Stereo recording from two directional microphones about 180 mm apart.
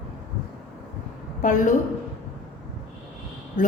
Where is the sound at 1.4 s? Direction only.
45° left (ahead or behind).